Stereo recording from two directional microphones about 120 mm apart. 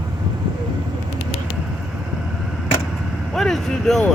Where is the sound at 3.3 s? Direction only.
5° left (ahead or behind).